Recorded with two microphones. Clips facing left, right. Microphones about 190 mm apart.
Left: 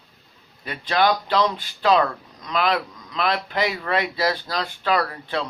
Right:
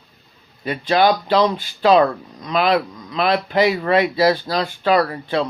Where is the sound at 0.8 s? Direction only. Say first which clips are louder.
Right 4 dB; 30° right (ahead or behind).